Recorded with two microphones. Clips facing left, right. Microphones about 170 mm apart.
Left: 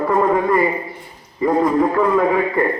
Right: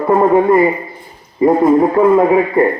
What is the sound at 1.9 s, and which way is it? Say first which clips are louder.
Speech: right 6 dB; 30° right (ahead or behind).